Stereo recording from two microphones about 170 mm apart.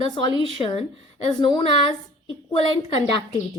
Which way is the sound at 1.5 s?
30° left (ahead or behind).